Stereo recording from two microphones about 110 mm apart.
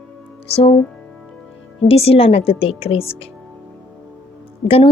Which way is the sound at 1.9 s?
60° left (ahead or behind).